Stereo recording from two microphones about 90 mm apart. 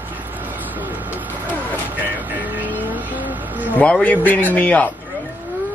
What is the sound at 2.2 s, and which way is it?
Vehicle, 20° right (ahead or behind).